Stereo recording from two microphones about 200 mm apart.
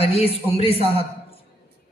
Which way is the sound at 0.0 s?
30° left (ahead or behind).